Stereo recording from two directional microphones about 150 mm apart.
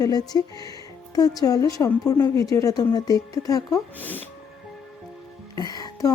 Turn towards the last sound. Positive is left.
turn(degrees=25)  # may be behind; listen again after turning